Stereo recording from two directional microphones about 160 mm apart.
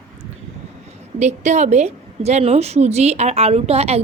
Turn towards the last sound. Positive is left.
turn(degrees=-40)  # may be behind; listen again after turning